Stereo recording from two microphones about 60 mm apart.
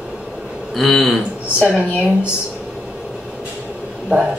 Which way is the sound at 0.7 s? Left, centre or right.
Centre.